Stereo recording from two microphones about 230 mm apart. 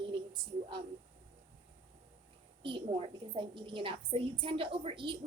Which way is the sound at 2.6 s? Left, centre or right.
Right.